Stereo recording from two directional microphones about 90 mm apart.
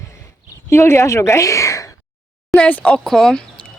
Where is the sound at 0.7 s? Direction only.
30° left (ahead or behind).